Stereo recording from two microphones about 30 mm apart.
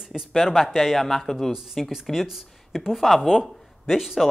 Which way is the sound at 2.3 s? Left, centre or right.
Centre.